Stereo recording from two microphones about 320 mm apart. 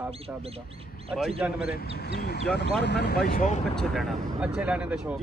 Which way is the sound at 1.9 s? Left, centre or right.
Left.